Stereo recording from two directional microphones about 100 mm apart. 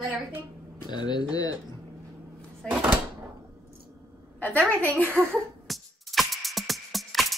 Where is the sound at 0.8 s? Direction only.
50° left (ahead or behind).